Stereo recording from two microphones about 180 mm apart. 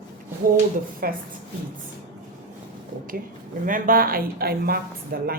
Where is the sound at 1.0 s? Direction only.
55° right (ahead or behind).